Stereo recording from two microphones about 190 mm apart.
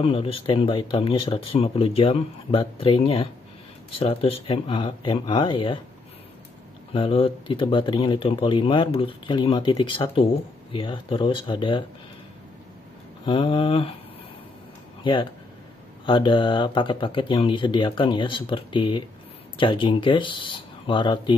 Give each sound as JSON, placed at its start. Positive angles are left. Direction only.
{"t": 0.0, "sound": "speech", "side_deg": 30}
{"t": 6.9, "sound": "speech", "side_deg": 30}
{"t": 13.2, "sound": "speech", "side_deg": 25}
{"t": 15.0, "sound": "speech", "side_deg": 25}